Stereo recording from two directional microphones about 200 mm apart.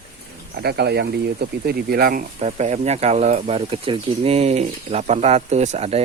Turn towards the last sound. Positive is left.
turn(degrees=-30)  # may be behind; listen again after turning